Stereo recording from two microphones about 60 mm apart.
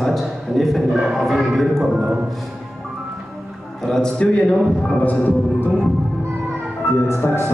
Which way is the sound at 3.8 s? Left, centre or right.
Centre.